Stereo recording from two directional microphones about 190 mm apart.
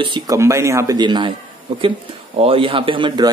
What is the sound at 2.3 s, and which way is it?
Speech, 30° right (ahead or behind).